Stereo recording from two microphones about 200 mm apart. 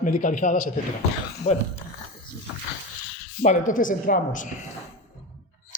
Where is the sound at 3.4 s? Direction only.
40° left (ahead or behind).